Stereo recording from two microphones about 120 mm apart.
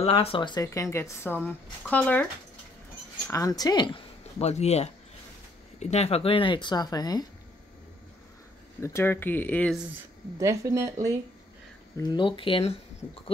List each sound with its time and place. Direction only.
0.0 s speech: 50° left (ahead or behind)
0.7 s speech: 25° left (ahead or behind)
3.3 s a woman's voice: 30° left (ahead or behind)
4.4 s speech: 65° left (ahead or behind); by 7.2 s 35° left (ahead or behind)
8.8 s speech: 20° left (ahead or behind)
10.4 s speech: 25° right (ahead or behind)
12.0 s speech: 40° left (ahead or behind)